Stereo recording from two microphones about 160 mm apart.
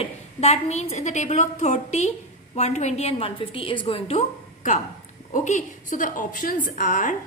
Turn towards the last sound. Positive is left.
turn(degrees=55)  # may be behind; listen again after turning